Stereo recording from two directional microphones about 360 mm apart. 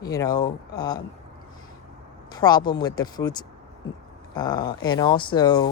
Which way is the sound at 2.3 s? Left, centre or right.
Centre.